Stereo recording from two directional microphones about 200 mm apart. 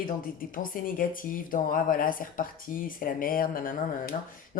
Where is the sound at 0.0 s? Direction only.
45° left (ahead or behind).